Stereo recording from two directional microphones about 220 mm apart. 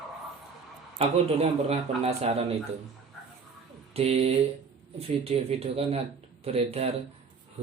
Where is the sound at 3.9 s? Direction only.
25° right (ahead or behind).